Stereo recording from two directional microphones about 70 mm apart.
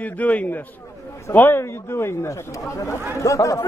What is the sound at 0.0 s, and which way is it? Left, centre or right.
A man's voice, left.